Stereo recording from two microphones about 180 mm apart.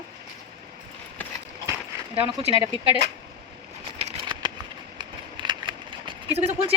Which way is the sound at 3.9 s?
30° right (ahead or behind).